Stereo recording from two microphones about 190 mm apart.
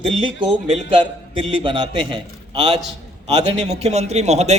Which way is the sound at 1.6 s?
25° right (ahead or behind).